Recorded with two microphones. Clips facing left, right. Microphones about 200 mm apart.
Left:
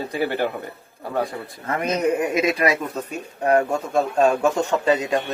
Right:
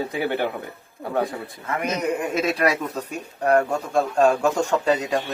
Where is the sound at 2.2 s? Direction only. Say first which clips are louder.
Left 2 dB; 10° left (ahead or behind).